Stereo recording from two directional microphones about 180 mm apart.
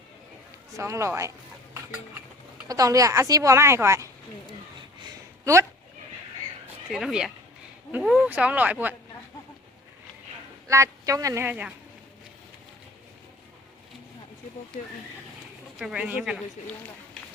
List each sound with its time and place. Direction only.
0.8 s a woman's voice: 15° right (ahead or behind)
2.6 s a woman's voice: 20° right (ahead or behind)
6.8 s a woman's voice: centre (ahead or behind)
10.7 s a woman's voice: 15° right (ahead or behind)
15.8 s speech: 5° right (ahead or behind)